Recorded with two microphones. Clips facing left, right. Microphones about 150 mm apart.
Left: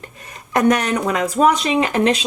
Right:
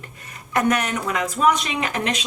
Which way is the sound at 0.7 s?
35° left (ahead or behind).